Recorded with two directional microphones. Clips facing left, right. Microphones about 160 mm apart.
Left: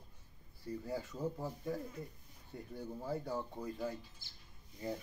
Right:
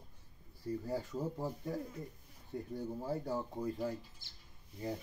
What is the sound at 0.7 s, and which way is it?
Speech, 40° right (ahead or behind).